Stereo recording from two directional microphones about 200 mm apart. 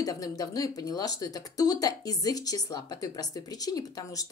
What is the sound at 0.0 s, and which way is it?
Speech, 20° left (ahead or behind).